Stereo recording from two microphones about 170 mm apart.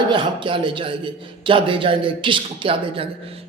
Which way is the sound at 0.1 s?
30° right (ahead or behind).